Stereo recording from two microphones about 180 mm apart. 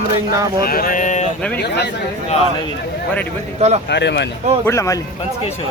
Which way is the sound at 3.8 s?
70° left (ahead or behind).